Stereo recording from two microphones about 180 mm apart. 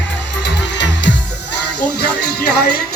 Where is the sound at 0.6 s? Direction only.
75° left (ahead or behind).